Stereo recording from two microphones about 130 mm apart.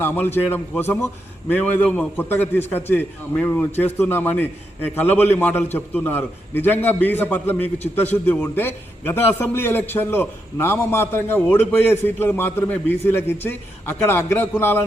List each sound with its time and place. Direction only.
0.0 s a man's voice: 15° left (ahead or behind)
1.6 s a man's voice: 10° left (ahead or behind)